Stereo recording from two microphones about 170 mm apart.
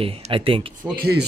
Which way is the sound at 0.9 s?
65° right (ahead or behind).